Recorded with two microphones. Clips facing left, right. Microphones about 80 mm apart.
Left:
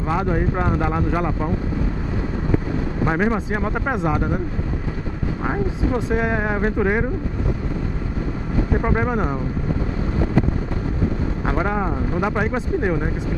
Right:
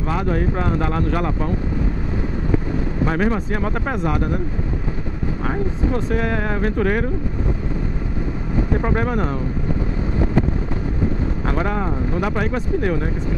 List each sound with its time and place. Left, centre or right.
0.1 s speech: centre
3.1 s speech: centre
5.5 s speech: centre
8.8 s speech: centre
11.4 s speech: centre